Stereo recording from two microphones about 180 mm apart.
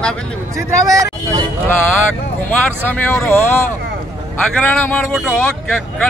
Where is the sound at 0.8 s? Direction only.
20° right (ahead or behind).